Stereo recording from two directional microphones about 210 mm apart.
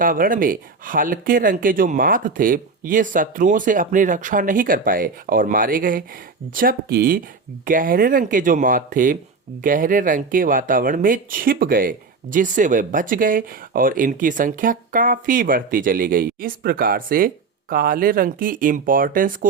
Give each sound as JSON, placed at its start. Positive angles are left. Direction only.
{"t": 0.0, "sound": "speech", "side_deg": -40}